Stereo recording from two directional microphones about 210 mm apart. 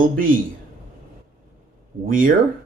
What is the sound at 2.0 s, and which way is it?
Speech, 40° right (ahead or behind).